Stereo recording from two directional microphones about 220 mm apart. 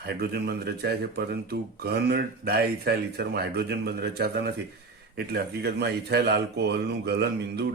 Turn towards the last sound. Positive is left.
turn(degrees=-50)  # may be behind; listen again after turning